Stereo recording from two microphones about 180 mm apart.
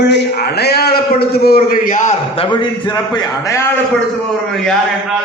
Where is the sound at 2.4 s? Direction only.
25° left (ahead or behind).